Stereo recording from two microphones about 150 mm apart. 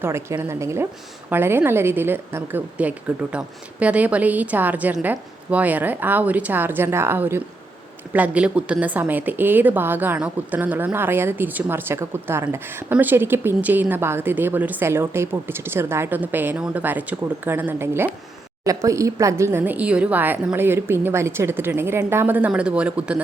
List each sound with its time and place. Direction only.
0.0 s a woman's voice: 15° right (ahead or behind)